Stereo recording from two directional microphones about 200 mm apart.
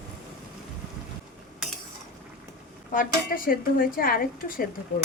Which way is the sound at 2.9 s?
45° left (ahead or behind).